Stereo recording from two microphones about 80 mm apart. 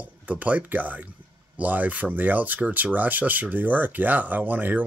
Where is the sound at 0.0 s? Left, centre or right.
Centre.